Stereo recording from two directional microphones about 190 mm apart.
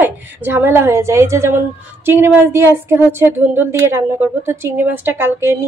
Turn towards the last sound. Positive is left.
turn(degrees=-10)  # may be behind; listen again after turning